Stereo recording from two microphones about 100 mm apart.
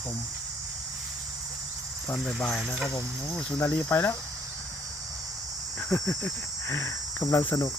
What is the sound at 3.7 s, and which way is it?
Speech, 20° left (ahead or behind).